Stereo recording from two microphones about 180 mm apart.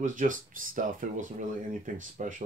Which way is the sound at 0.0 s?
45° right (ahead or behind).